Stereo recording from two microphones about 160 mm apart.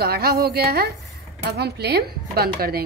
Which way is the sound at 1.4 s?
90° right.